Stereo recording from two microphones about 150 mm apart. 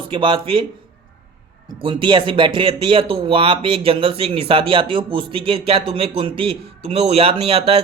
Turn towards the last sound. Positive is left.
turn(degrees=-40)  # may be behind; listen again after turning